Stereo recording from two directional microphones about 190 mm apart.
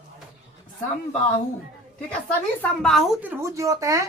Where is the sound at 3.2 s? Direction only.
15° right (ahead or behind).